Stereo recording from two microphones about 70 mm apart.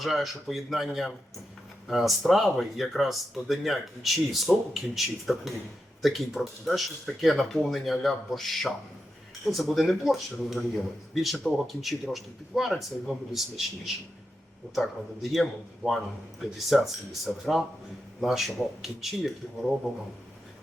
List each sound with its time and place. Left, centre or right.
0.0 s speech: centre